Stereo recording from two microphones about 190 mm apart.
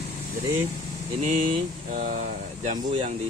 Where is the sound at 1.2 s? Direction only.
40° right (ahead or behind).